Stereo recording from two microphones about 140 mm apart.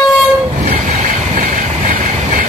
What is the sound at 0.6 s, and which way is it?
Vehicle, 60° right (ahead or behind).